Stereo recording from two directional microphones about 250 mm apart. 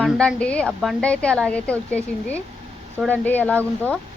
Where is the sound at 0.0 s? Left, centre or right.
Centre.